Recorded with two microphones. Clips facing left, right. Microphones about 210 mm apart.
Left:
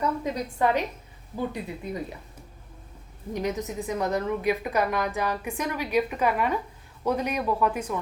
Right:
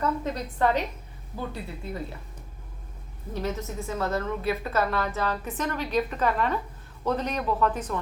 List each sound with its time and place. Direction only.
0.0 s a woman's voice: 10° left (ahead or behind)
3.3 s a woman's voice: 15° left (ahead or behind)